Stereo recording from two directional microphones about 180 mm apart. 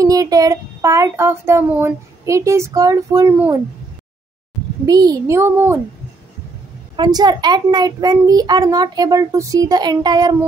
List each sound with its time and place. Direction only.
0.0 s child singing: 20° right (ahead or behind)
4.8 s a child's voice: 20° right (ahead or behind)
7.0 s a child's voice: 25° right (ahead or behind)